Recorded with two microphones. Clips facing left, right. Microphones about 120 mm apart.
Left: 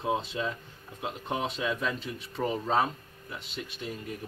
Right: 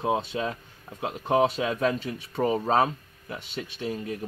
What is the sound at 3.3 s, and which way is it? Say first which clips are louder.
Speech: right 4 dB; 75° right (ahead or behind).